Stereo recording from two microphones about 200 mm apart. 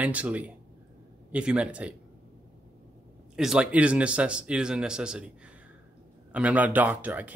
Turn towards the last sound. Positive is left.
turn(degrees=-10)  # may be behind; listen again after turning